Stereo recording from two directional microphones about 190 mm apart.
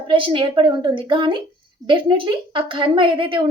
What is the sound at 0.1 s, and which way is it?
Speech, 25° right (ahead or behind).